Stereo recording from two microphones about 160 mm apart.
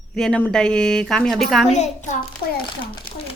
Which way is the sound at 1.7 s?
45° left (ahead or behind).